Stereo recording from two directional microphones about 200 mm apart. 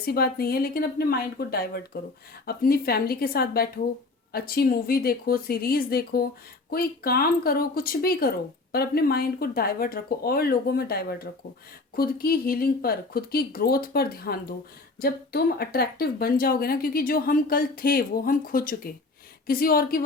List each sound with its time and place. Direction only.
0.0 s speech: 50° left (ahead or behind)